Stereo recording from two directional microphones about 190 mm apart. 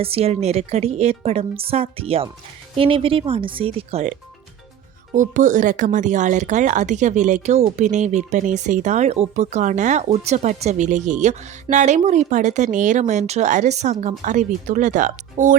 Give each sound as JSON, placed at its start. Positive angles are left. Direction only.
{"t": 0.0, "sound": "speech", "side_deg": -30}